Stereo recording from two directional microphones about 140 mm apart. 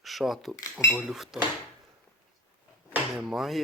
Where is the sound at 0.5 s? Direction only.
25° left (ahead or behind).